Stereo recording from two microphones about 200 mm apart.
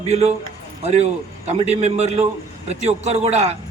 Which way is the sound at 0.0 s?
35° right (ahead or behind).